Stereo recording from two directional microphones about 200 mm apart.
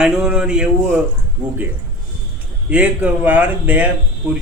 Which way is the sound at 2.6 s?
5° right (ahead or behind).